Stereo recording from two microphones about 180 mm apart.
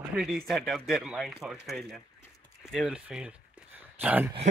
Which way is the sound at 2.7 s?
5° right (ahead or behind).